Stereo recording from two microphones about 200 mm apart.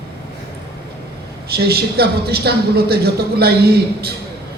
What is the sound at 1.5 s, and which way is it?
A woman's voice, 50° right (ahead or behind).